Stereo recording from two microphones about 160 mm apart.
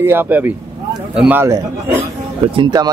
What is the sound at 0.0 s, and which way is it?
A man's voice, 15° right (ahead or behind).